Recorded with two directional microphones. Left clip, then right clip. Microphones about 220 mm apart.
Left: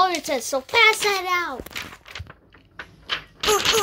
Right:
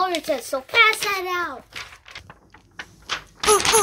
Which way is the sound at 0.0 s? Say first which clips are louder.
Left 2 dB; 40° left (ahead or behind).